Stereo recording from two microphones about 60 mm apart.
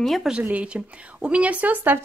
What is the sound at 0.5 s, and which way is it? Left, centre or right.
Speech, centre.